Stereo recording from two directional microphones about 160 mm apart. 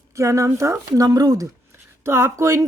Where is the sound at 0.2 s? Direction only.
20° right (ahead or behind).